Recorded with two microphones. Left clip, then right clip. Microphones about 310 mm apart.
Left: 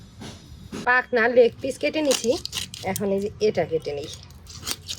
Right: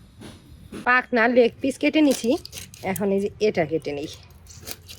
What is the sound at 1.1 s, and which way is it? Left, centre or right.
Speech, right.